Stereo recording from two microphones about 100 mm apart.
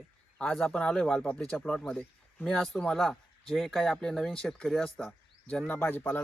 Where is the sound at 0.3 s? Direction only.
5° left (ahead or behind).